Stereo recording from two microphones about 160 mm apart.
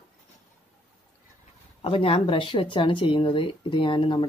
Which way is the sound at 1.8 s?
35° left (ahead or behind).